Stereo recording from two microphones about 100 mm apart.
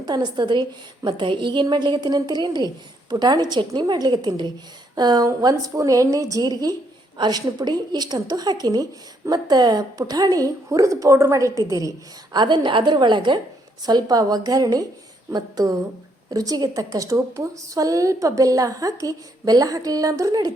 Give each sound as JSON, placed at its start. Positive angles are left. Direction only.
{"t": 0.0, "sound": "a woman's voice", "side_deg": -45}